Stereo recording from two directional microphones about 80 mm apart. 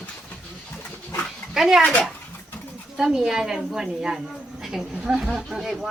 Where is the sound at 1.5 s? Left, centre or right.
Centre.